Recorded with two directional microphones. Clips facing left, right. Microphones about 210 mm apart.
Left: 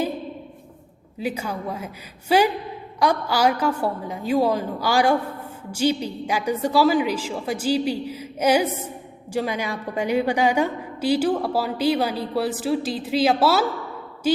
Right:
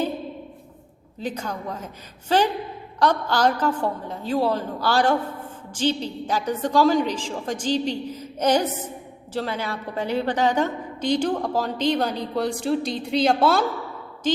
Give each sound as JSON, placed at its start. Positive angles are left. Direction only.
{"t": 1.2, "sound": "a woman's voice", "side_deg": 10}